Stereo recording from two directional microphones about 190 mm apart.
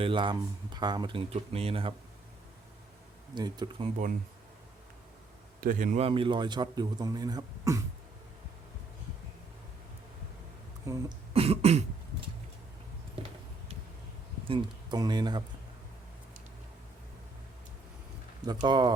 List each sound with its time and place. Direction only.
0.0 s a man's voice: 25° right (ahead or behind)
3.3 s a man's voice: 20° right (ahead or behind)
5.5 s a man's voice: 45° right (ahead or behind); by 7.8 s 20° right (ahead or behind)
10.9 s speech: 15° right (ahead or behind)
11.3 s cough: 30° right (ahead or behind)
14.4 s speech: 25° right (ahead or behind)
18.6 s a man's voice: 20° right (ahead or behind)